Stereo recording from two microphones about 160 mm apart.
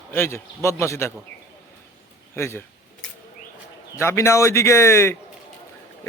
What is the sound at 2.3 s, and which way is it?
Speech, 15° left (ahead or behind).